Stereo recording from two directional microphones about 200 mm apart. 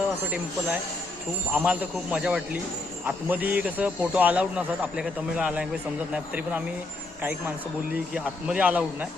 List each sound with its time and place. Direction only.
1.5 s speech: 5° right (ahead or behind)
8.1 s speech: 5° right (ahead or behind)